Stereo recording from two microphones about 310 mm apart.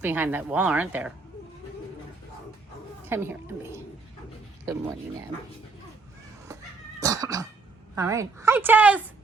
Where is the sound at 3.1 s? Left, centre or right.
Centre.